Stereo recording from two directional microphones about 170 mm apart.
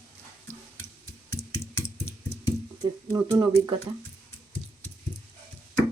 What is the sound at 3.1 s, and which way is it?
Speech, 20° right (ahead or behind).